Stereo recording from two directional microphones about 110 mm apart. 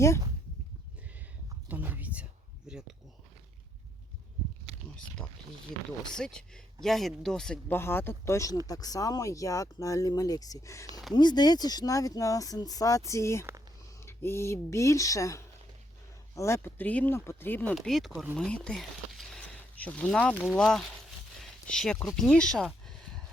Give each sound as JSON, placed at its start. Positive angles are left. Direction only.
{"t": 1.6, "sound": "a sound", "side_deg": -15}
{"t": 2.6, "sound": "speech", "side_deg": -5}
{"t": 6.1, "sound": "speech", "side_deg": 5}
{"t": 7.7, "sound": "speech", "side_deg": 20}
{"t": 11.1, "sound": "speech", "side_deg": 40}
{"t": 17.7, "sound": "speech", "side_deg": 0}
{"t": 18.3, "sound": "a sound", "side_deg": 10}
{"t": 20.6, "sound": "speech", "side_deg": 5}
{"t": 21.3, "sound": "a sound", "side_deg": 5}
{"t": 22.1, "sound": "speech", "side_deg": 5}